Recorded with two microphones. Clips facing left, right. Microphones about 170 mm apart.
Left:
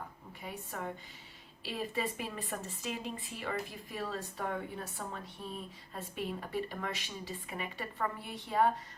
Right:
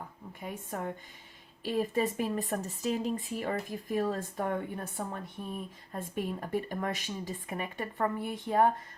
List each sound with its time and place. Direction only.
0.4 s speech: 50° right (ahead or behind)